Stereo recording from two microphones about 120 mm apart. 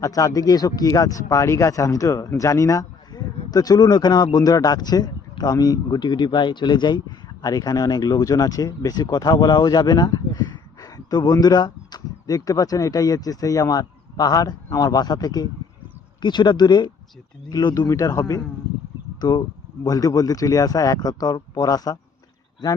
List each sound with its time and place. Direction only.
0.0 s speech: 30° left (ahead or behind)
19.8 s speech: 30° left (ahead or behind)